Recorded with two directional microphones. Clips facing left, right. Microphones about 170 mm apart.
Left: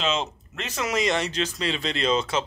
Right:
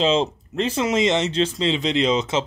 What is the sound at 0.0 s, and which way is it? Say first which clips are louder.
Speech: right 7 dB; 30° right (ahead or behind).